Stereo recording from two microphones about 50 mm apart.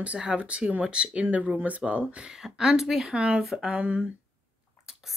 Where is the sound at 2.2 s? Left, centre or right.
Centre.